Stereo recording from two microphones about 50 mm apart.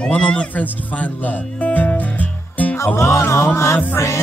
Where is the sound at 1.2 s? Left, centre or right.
Left.